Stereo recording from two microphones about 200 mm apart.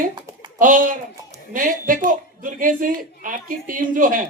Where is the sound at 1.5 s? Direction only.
40° right (ahead or behind).